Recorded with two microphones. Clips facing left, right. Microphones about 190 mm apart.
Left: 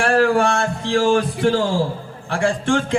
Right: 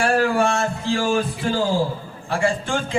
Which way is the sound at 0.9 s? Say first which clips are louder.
Left 5 dB; 85° left.